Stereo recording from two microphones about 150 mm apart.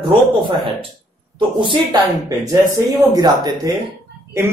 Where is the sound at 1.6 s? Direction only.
30° right (ahead or behind).